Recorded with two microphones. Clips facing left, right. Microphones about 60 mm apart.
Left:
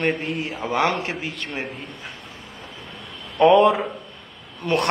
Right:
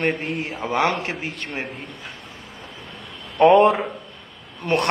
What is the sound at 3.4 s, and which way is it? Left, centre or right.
A man's voice, right.